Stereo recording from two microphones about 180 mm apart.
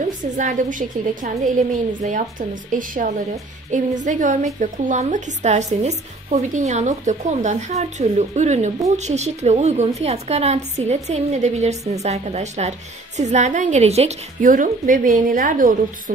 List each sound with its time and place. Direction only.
0.2 s a woman's voice: 45° right (ahead or behind)